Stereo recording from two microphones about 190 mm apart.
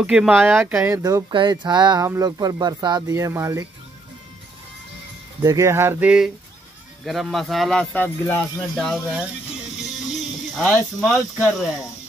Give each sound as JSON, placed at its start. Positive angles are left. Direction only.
{"t": 0.0, "sound": "speech", "side_deg": -5}
{"t": 0.6, "sound": "speech", "side_deg": -10}
{"t": 5.4, "sound": "speech", "side_deg": -15}